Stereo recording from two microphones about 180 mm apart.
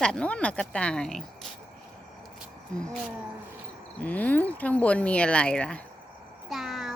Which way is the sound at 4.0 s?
10° left (ahead or behind).